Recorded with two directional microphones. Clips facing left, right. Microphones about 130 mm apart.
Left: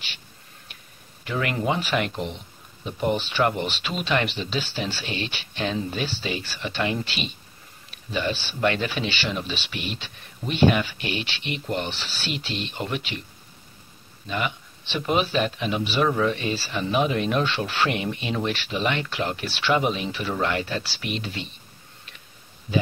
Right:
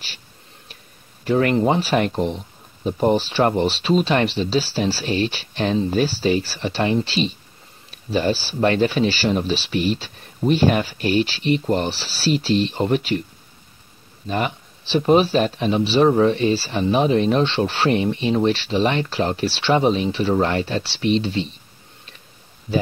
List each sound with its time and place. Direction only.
1.2 s speech: 35° right (ahead or behind)
14.2 s speech: 35° right (ahead or behind)